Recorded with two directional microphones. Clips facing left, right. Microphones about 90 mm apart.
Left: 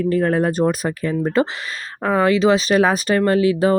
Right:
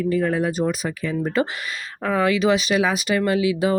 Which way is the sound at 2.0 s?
35° left (ahead or behind).